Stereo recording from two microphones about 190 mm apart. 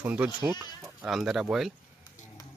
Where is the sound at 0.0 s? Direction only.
10° right (ahead or behind).